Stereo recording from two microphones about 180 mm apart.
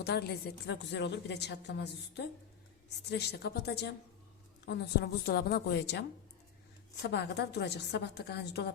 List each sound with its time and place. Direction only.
0.0 s a woman's voice: 65° left (ahead or behind)